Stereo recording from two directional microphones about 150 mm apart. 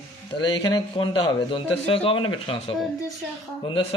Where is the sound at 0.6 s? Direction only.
30° left (ahead or behind).